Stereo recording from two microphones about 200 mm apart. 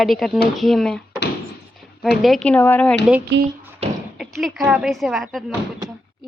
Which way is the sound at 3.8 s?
30° right (ahead or behind).